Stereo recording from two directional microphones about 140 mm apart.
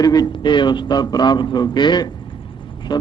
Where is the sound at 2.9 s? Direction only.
30° left (ahead or behind).